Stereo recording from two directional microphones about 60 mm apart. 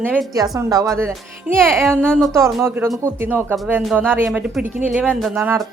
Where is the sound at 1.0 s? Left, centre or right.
Right.